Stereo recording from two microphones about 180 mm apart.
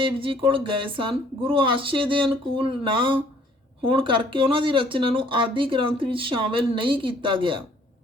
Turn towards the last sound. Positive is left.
turn(degrees=-30)  # may be behind; listen again after turning